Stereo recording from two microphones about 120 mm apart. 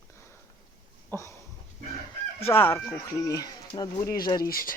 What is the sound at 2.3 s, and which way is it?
Speech, 20° left (ahead or behind).